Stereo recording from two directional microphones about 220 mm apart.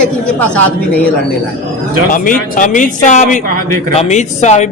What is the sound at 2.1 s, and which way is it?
Speech, 35° left (ahead or behind).